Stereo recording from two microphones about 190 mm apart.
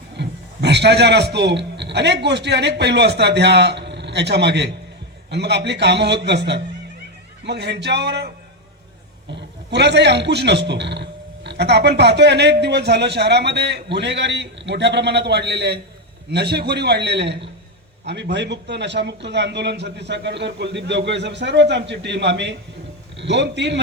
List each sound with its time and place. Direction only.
0.2 s a man's voice: 60° right (ahead or behind)
9.3 s a man's voice: 65° right (ahead or behind)